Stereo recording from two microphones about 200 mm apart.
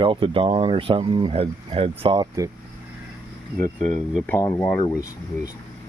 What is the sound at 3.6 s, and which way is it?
Speech, 5° left (ahead or behind).